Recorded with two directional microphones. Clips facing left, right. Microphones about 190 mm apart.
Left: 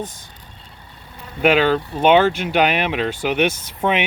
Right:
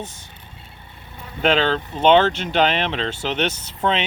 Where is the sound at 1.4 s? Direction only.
10° left (ahead or behind).